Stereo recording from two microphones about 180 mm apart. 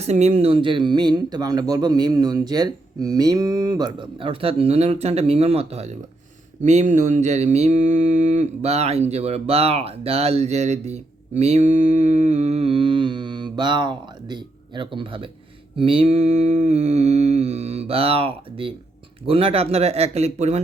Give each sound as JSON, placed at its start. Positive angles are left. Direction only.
{"t": 0.0, "sound": "speech", "side_deg": -35}
{"t": 6.6, "sound": "mantra", "side_deg": -40}